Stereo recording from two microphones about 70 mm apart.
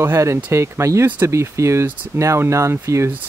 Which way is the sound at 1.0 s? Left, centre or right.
Right.